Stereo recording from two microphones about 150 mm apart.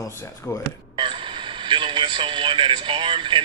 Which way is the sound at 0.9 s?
35° right (ahead or behind).